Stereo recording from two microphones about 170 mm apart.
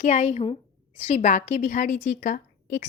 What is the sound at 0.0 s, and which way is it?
A woman's voice, 40° left (ahead or behind).